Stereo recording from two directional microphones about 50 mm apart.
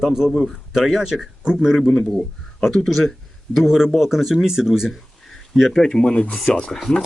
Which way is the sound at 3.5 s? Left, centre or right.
Centre.